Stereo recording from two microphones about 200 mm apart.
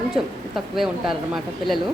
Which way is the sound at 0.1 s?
Centre (ahead or behind).